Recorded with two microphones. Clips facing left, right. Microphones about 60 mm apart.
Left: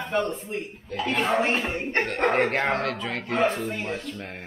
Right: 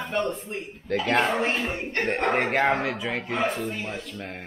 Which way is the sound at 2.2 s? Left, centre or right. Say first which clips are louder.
Even; centre.